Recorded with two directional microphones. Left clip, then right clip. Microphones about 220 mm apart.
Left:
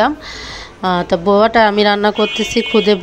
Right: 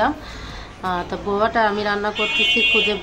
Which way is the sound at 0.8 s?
35° left (ahead or behind).